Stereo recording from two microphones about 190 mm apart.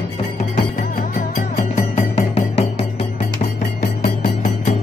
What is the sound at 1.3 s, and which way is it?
Music, 35° left (ahead or behind).